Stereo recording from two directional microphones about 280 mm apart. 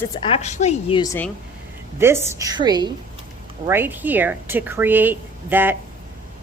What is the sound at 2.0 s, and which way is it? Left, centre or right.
A woman's voice, centre.